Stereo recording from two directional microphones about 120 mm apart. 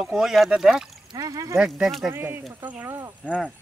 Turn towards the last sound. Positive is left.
turn(degrees=-20)  # may be behind; listen again after turning